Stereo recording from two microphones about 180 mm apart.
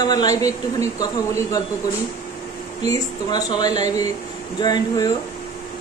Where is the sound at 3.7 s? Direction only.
40° right (ahead or behind).